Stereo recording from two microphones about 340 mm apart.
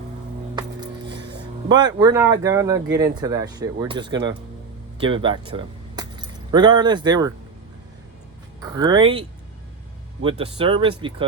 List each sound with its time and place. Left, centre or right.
1.0 s music: right
1.7 s speech: centre
8.7 s speech: centre
10.2 s speech: centre